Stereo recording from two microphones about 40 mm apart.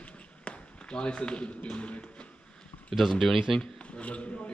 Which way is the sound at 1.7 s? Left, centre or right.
Left.